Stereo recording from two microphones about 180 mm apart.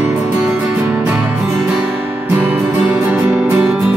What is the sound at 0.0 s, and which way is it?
Music, 5° right (ahead or behind).